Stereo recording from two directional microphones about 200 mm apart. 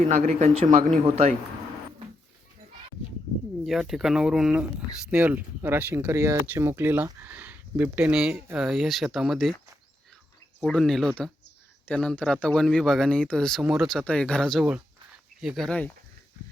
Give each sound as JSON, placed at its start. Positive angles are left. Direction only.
{"t": 0.0, "sound": "speech", "side_deg": -35}
{"t": 3.7, "sound": "speech", "side_deg": 0}
{"t": 10.6, "sound": "speech", "side_deg": 0}